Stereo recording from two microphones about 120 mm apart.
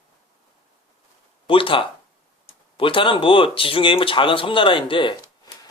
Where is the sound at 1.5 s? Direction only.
45° left (ahead or behind).